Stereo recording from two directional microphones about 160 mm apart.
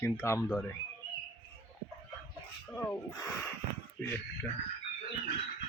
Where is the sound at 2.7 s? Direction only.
10° left (ahead or behind).